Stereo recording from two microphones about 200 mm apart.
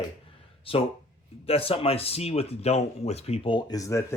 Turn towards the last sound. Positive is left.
turn(degrees=15)  # may be behind; listen again after turning